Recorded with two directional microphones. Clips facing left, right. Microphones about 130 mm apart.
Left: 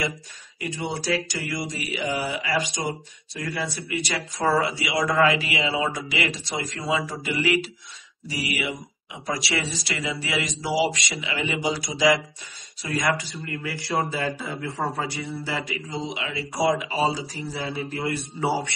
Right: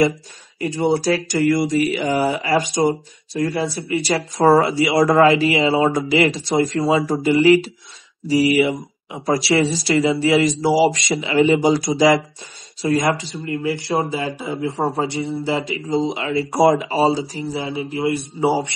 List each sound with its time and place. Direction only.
0.6 s speech: 40° right (ahead or behind)
2.9 s speech: 30° right (ahead or behind)
12.8 s speech: 25° right (ahead or behind)